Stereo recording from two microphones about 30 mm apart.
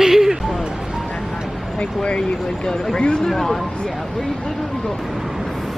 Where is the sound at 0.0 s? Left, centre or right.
Centre.